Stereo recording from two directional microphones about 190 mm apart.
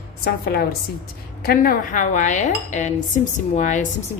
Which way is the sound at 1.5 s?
50° left (ahead or behind).